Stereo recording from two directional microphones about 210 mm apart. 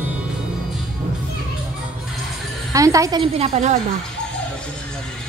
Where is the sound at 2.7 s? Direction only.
15° right (ahead or behind).